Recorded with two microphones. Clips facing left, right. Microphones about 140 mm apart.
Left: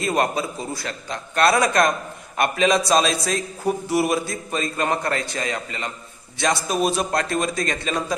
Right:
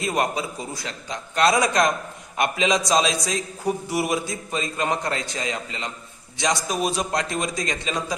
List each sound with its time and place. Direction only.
0.2 s a man's voice: 15° right (ahead or behind)